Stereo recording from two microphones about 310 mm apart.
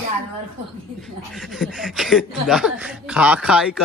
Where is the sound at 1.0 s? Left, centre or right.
Centre.